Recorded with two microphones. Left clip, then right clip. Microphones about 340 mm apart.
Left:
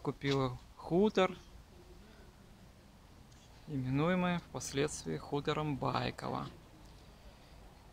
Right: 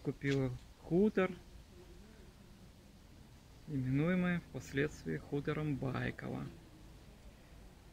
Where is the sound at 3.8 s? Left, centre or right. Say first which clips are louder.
Left 2 dB; left.